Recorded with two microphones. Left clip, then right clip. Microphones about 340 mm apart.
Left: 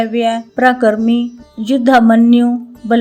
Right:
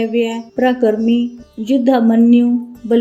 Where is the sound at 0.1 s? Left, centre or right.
Left.